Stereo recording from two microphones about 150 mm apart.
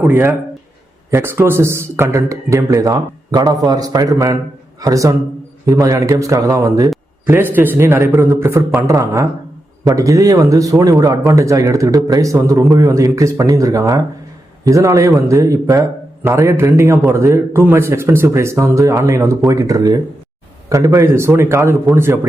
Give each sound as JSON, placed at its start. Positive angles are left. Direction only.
{"t": 0.0, "sound": "a man's voice", "side_deg": -15}